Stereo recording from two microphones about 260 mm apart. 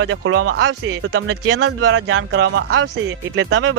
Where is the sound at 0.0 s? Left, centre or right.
Right.